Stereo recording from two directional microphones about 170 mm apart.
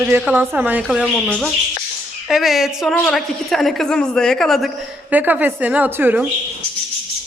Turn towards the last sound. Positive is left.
turn(degrees=-10)  # may be behind; listen again after turning